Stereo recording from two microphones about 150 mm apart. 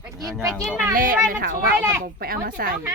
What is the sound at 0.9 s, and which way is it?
Speech, 70° right (ahead or behind).